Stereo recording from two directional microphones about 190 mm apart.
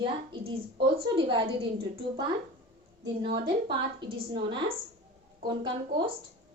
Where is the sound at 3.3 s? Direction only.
25° right (ahead or behind).